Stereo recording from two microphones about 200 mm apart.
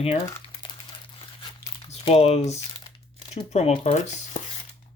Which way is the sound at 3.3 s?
30° left (ahead or behind).